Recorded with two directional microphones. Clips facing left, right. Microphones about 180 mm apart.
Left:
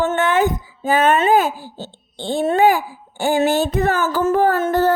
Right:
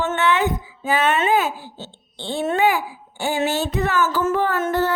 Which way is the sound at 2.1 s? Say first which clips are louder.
Left 4 dB; 45° left (ahead or behind).